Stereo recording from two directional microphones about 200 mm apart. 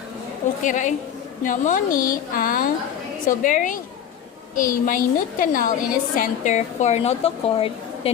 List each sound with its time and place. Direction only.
0.6 s a woman's voice: 40° left (ahead or behind)